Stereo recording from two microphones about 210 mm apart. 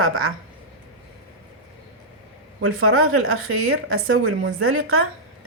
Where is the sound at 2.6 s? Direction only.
85° right.